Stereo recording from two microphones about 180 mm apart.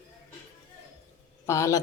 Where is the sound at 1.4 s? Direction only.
15° left (ahead or behind).